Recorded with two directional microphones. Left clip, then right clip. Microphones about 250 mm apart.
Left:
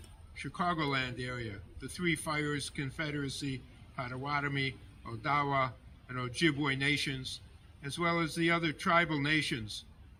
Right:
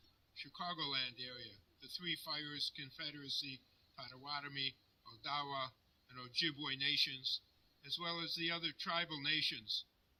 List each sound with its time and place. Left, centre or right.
0.4 s a man's voice: centre